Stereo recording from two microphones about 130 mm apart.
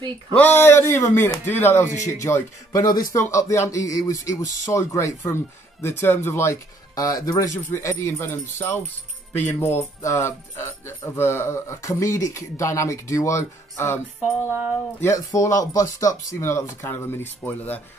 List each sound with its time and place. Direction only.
0.3 s speech: 15° left (ahead or behind)